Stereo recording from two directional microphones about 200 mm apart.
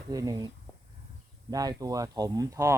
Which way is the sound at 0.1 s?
20° right (ahead or behind).